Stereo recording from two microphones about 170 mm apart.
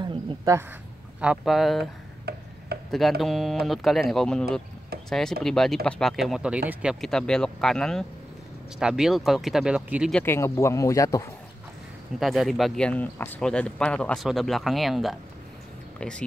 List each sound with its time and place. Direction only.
0.0 s a sound: 30° right (ahead or behind)
1.2 s speech: 5° right (ahead or behind)
2.3 s tick-tock: 70° right (ahead or behind)
2.7 s a sound: 70° right (ahead or behind)
3.2 s speech: centre (ahead or behind)
10.1 s speech: 15° left (ahead or behind)
12.2 s speech: centre (ahead or behind)